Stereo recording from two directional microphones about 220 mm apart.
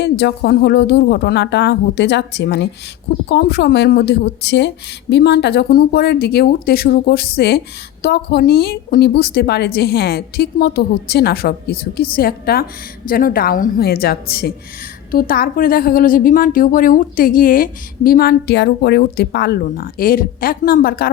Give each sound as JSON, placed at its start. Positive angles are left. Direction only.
{"t": 0.0, "sound": "a woman's voice", "side_deg": 50}